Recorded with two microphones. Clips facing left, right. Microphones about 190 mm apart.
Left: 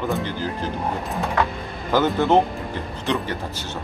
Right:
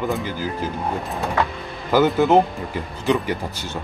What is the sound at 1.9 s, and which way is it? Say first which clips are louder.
Speech: right 2 dB; 10° right (ahead or behind).